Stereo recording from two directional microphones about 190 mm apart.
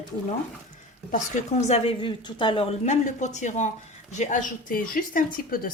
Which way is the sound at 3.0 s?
40° left (ahead or behind).